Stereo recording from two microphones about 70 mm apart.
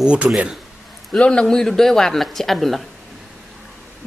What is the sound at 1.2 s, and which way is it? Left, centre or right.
Speech, centre.